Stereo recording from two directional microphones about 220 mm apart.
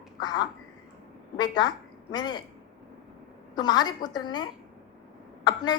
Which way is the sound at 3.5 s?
20° left (ahead or behind).